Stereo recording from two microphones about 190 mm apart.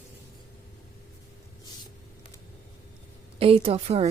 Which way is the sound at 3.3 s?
30° right (ahead or behind).